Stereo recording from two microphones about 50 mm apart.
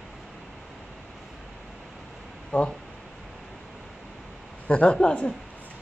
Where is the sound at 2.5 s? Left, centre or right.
Left.